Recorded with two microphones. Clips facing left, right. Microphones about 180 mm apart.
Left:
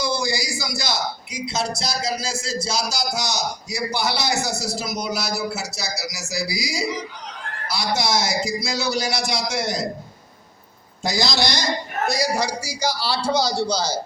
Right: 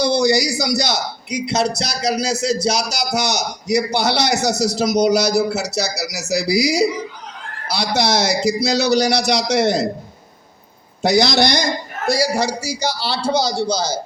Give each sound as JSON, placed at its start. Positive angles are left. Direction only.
{"t": 0.0, "sound": "a man's voice", "side_deg": -65}
{"t": 11.0, "sound": "a man's voice", "side_deg": -65}
{"t": 12.0, "sound": "a man's voice", "side_deg": -30}